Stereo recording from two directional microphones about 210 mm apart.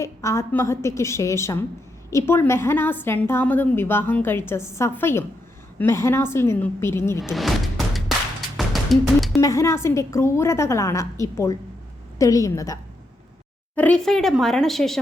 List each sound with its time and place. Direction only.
0.0 s a woman's voice: 15° left (ahead or behind)
7.2 s music: centre (ahead or behind)
9.4 s a woman's voice: 15° left (ahead or behind)